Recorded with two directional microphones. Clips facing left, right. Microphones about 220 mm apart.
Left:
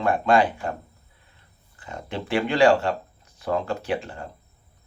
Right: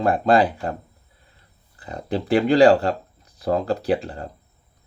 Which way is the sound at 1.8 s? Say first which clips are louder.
Right 6 dB; 35° right (ahead or behind).